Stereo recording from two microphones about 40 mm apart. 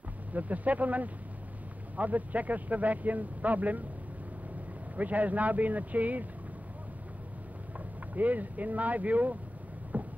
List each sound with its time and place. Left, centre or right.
0.3 s speech: right
4.9 s speech: right
8.1 s speech: right
9.9 s a sound: right